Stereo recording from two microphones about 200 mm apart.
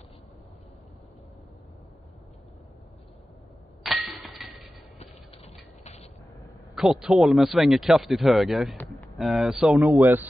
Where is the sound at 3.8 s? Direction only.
Centre (ahead or behind).